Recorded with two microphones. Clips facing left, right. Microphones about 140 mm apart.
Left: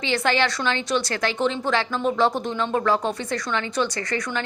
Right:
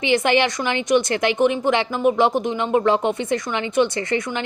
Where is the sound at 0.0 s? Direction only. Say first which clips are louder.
Right 4 dB; 20° right (ahead or behind).